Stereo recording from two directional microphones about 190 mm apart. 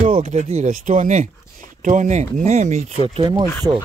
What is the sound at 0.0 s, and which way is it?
Speech, 35° right (ahead or behind).